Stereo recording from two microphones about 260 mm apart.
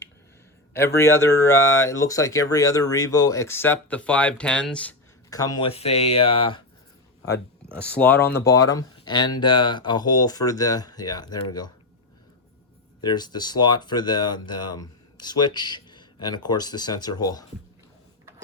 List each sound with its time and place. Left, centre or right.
0.9 s speech: centre
7.7 s speech: centre
13.0 s speech: centre